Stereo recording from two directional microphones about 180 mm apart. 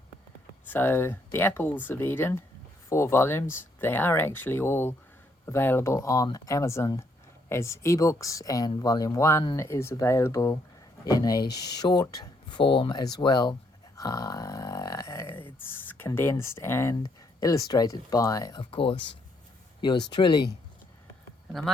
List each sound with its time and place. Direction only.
0.7 s speech: 10° left (ahead or behind)